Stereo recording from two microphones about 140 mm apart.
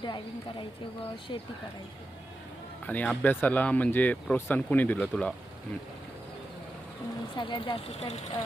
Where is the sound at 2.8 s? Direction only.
10° left (ahead or behind).